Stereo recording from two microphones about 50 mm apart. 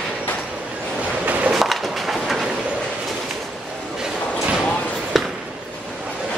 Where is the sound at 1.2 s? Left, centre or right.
Right.